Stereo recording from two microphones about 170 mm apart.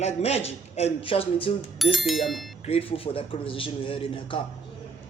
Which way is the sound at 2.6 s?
35° left (ahead or behind).